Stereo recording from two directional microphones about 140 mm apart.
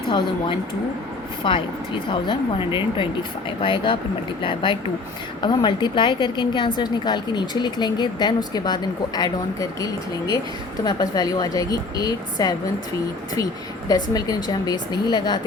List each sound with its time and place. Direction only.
0.1 s speech: 35° left (ahead or behind)